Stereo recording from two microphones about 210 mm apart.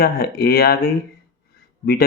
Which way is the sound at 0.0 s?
45° left (ahead or behind).